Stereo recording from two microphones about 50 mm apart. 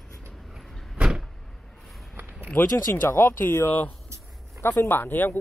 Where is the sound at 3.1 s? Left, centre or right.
Left.